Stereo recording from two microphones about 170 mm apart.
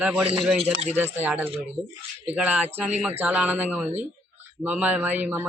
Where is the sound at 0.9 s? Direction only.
10° right (ahead or behind).